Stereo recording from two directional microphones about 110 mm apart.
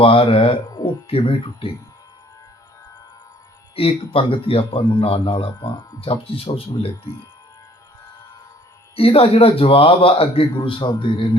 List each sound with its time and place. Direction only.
0.0 s a man's voice: 55° left (ahead or behind)
0.7 s music: 35° left (ahead or behind)
1.0 s a man's voice: 60° left (ahead or behind)
3.8 s a man's voice: 55° left (ahead or behind)
9.0 s a man's voice: 60° left (ahead or behind)